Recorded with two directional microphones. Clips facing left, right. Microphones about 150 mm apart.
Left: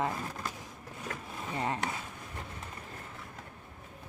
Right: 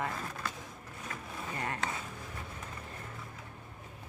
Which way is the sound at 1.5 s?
25° left (ahead or behind).